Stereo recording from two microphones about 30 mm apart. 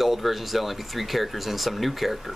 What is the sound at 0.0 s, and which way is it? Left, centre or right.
Speech, centre.